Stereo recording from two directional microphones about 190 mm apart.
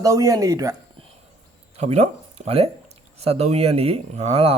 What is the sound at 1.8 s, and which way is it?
Speech, 35° right (ahead or behind).